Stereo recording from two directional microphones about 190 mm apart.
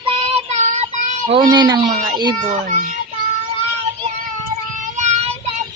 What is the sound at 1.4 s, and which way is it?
Speech, 20° right (ahead or behind).